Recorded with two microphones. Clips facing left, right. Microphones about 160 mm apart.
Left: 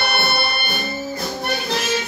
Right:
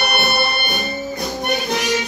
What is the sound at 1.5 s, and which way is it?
Music, 20° right (ahead or behind).